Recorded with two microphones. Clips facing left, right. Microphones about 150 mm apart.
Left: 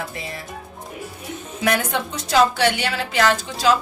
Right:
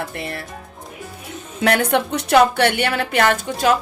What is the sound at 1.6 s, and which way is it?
A woman's voice, 65° right (ahead or behind).